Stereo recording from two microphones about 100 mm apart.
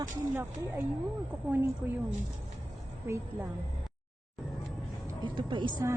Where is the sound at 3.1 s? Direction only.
25° right (ahead or behind).